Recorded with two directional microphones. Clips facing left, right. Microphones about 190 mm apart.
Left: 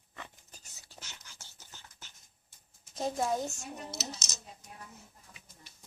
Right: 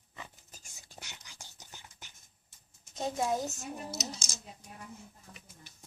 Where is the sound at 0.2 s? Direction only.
10° right (ahead or behind).